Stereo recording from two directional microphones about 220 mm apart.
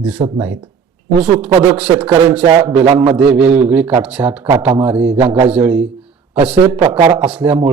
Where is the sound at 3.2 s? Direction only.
5° right (ahead or behind).